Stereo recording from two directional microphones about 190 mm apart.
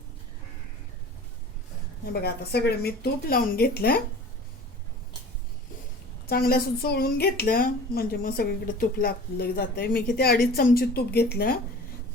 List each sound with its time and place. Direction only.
2.1 s speech: 55° left (ahead or behind)
6.2 s a woman's voice: 55° left (ahead or behind)